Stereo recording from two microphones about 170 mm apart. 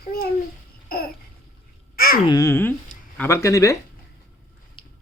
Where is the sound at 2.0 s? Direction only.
60° left (ahead or behind).